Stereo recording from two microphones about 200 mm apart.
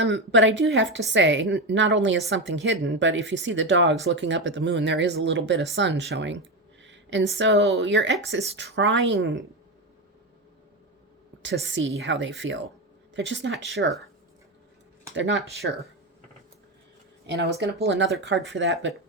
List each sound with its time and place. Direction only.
0.0 s a woman's voice: 65° right (ahead or behind)
6.8 s a sound: 65° right (ahead or behind)
7.3 s a woman's voice: 65° right (ahead or behind)
11.6 s a woman's voice: 70° right (ahead or behind)
15.1 s a woman's voice: 65° right (ahead or behind)
17.2 s a woman's voice: 60° right (ahead or behind)